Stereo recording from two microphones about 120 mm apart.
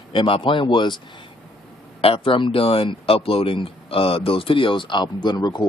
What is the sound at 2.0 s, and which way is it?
Speech, 50° left (ahead or behind).